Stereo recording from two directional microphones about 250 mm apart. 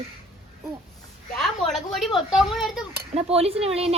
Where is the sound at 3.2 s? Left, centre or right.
Right.